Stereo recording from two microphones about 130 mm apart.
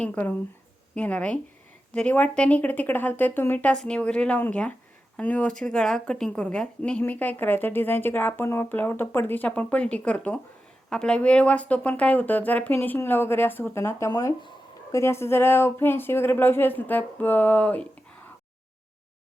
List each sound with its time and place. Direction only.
0.0 s speech: 10° left (ahead or behind)